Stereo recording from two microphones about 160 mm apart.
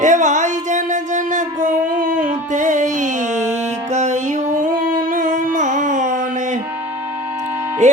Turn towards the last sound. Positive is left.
turn(degrees=-50)  # may be behind; listen again after turning